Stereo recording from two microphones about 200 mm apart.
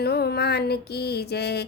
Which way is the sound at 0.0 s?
50° left (ahead or behind).